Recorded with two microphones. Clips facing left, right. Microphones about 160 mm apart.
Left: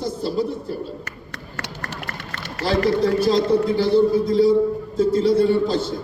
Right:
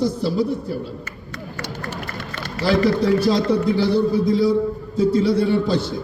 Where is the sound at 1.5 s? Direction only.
80° left.